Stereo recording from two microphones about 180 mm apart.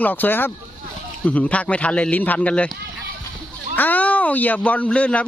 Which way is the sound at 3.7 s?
10° left (ahead or behind).